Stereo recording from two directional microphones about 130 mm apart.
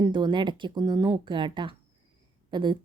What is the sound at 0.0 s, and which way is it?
Speech, 35° right (ahead or behind).